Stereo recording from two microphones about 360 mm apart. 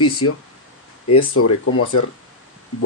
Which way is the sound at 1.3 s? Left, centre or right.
Left.